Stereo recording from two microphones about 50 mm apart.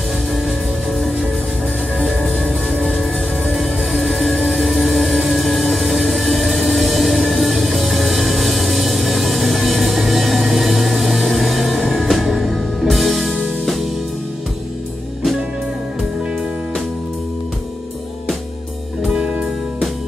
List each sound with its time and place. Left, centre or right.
0.3 s music: centre
2.0 s music: centre
2.7 s music: centre
5.2 s a sound: centre
19.0 s music: centre